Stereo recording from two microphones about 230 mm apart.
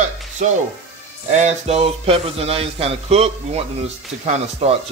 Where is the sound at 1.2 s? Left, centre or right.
Right.